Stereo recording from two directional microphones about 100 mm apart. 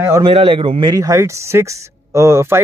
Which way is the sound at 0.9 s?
30° right (ahead or behind).